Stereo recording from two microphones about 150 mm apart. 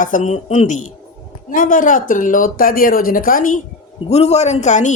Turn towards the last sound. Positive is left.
turn(degrees=55)  # may be behind; listen again after turning